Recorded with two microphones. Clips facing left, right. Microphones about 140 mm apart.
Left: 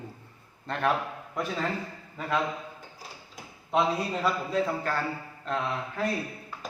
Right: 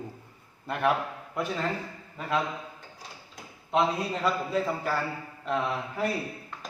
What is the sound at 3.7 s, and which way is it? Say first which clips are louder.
A man's voice: even; centre (ahead or behind).